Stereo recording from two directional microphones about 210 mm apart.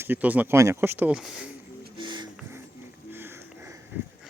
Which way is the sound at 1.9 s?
20° right (ahead or behind).